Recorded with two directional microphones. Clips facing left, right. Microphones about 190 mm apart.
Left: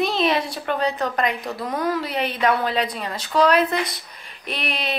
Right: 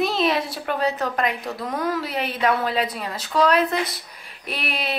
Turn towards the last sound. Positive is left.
turn(degrees=-5)  # may be behind; listen again after turning